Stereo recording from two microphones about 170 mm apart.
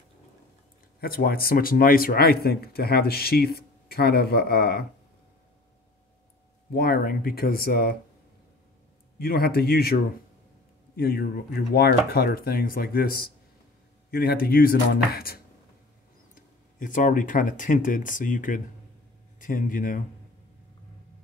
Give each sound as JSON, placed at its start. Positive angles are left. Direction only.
{"t": 1.0, "sound": "speech", "side_deg": 60}
{"t": 6.7, "sound": "speech", "side_deg": 60}
{"t": 9.2, "sound": "speech", "side_deg": 65}
{"t": 11.0, "sound": "speech", "side_deg": 65}
{"t": 16.3, "sound": "speech", "side_deg": 50}